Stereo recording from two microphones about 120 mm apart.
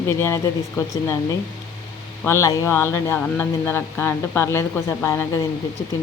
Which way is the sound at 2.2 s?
25° left (ahead or behind).